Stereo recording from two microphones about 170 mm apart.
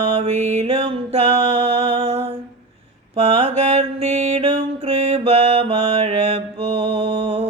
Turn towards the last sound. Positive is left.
turn(degrees=-35)  # may be behind; listen again after turning